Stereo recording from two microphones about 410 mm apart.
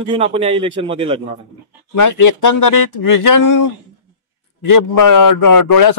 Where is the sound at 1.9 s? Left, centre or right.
Left.